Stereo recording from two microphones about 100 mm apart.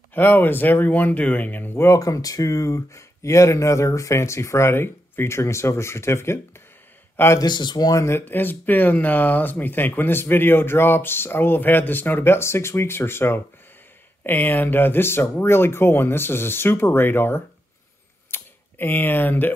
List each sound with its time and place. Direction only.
0.1 s speech: 20° left (ahead or behind)
1.9 s speech: 35° left (ahead or behind)
7.3 s speech: 45° left (ahead or behind)
8.0 s speech: 25° left (ahead or behind)
18.3 s a sound: 20° left (ahead or behind)